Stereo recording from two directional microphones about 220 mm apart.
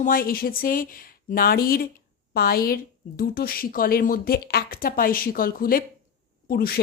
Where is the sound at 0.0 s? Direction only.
40° left (ahead or behind).